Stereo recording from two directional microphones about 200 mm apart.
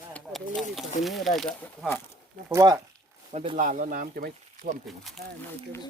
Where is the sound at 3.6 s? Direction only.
40° right (ahead or behind).